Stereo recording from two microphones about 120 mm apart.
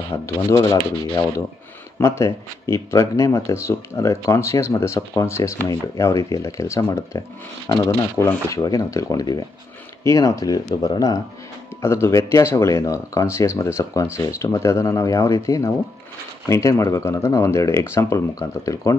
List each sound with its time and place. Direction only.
0.5 s speech: 30° left (ahead or behind)
2.0 s speech: 25° left (ahead or behind)